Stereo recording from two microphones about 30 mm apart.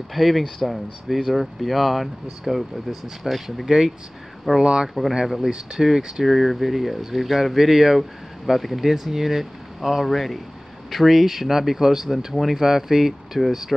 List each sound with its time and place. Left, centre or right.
0.1 s speech: centre
3.6 s speech: centre
5.5 s speech: centre
6.2 s speech: centre